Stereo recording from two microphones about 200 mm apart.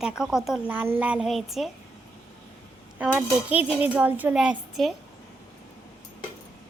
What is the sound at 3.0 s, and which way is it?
A woman's voice, 5° right (ahead or behind).